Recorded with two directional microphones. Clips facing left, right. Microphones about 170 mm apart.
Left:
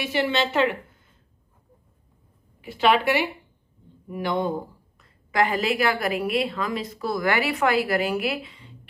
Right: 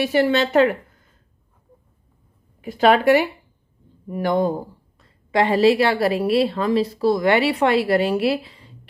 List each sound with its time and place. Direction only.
0.0 s a woman's voice: 40° right (ahead or behind)
2.6 s a woman's voice: 45° right (ahead or behind)
4.9 s a woman's voice: 30° right (ahead or behind)